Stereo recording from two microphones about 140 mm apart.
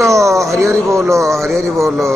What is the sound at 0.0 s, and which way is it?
Speech, 20° right (ahead or behind).